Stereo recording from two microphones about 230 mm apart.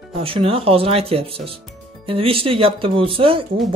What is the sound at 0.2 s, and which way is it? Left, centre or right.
Speech, right.